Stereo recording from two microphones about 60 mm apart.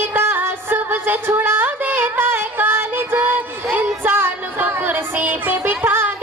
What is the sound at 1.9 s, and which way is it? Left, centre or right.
Music, right.